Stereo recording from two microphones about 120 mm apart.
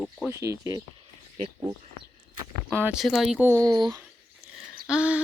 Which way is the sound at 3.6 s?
35° right (ahead or behind).